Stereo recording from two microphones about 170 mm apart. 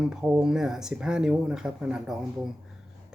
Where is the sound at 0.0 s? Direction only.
5° right (ahead or behind).